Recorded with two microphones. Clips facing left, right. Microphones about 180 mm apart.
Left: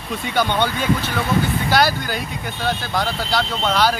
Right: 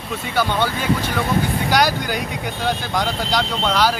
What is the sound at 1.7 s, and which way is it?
Speech, 15° right (ahead or behind).